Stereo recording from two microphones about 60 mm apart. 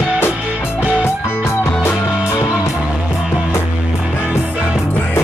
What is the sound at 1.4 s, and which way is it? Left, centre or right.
Music, left.